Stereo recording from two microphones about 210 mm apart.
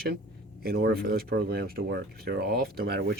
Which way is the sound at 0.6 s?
50° right (ahead or behind).